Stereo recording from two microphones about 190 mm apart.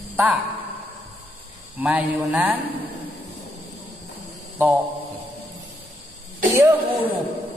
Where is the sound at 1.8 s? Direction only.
10° right (ahead or behind).